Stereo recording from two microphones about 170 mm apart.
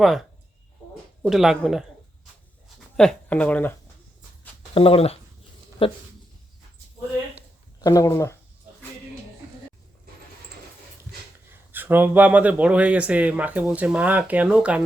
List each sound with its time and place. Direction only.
0.0 s speech: centre (ahead or behind)
3.0 s speech: 5° left (ahead or behind)
4.7 s speech: 35° left (ahead or behind)
7.8 s speech: 20° left (ahead or behind)
11.7 s speech: 10° right (ahead or behind)